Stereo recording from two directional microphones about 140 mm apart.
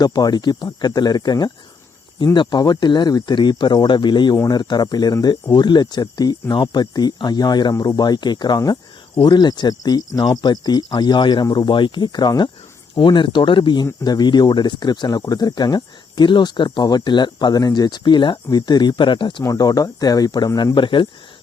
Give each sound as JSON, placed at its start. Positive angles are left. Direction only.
{"t": 0.0, "sound": "speech", "side_deg": 30}